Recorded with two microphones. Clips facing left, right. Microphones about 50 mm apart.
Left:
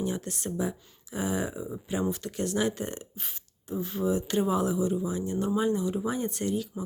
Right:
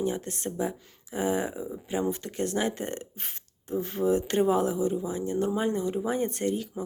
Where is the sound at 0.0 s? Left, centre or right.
Right.